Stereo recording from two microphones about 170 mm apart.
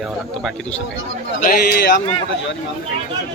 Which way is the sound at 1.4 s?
60° left (ahead or behind).